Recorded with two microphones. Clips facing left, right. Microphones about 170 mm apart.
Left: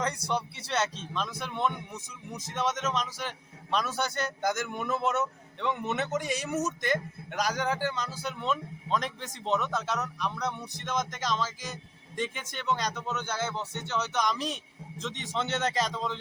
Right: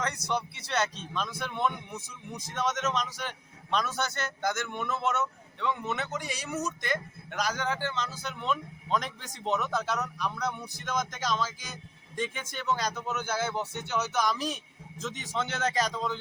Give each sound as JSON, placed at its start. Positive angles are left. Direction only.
{"t": 0.0, "sound": "speech", "side_deg": 30}
{"t": 0.7, "sound": "a man's voice", "side_deg": 5}
{"t": 5.9, "sound": "speech", "side_deg": 20}
{"t": 6.1, "sound": "speech", "side_deg": 45}
{"t": 6.5, "sound": "a man's voice", "side_deg": 20}